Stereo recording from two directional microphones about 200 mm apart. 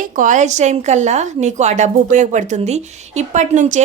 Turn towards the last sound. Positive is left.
turn(degrees=-35)  # may be behind; listen again after turning